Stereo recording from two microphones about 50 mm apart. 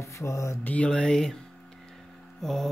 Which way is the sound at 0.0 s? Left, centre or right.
Left.